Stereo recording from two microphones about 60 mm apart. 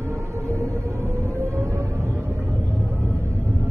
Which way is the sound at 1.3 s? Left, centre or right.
Right.